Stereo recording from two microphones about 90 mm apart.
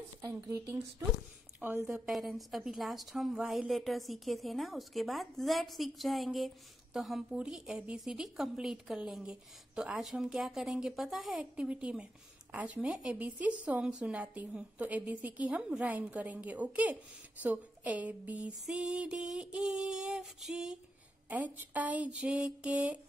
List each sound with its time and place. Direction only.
0.5 s speech: 35° right (ahead or behind)
1.6 s a woman's voice: 15° right (ahead or behind)
2.0 s a woman's voice: centre (ahead or behind)
21.3 s a woman's voice: 20° right (ahead or behind)